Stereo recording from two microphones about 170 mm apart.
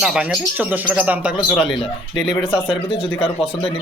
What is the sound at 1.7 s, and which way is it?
Speech, 25° left (ahead or behind).